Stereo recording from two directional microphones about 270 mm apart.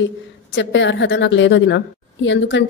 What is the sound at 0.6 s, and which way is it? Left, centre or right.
Speech, left.